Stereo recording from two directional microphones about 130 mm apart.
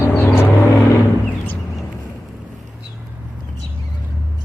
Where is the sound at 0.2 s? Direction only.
15° left (ahead or behind).